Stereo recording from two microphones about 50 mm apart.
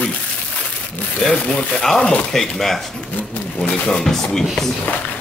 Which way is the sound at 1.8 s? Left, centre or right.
Centre.